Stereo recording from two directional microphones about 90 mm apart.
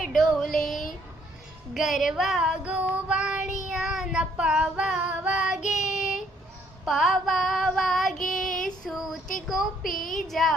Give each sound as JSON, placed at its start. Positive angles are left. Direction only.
{"t": 0.1, "sound": "a sound", "side_deg": 5}
{"t": 1.7, "sound": "female singing", "side_deg": 0}
{"t": 2.9, "sound": "child singing", "side_deg": -10}
{"t": 10.2, "sound": "female singing", "side_deg": 0}